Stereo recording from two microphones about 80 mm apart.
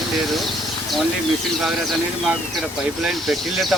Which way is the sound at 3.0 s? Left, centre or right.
Centre.